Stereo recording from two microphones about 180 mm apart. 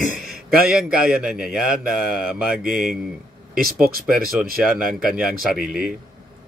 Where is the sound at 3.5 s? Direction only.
55° right (ahead or behind).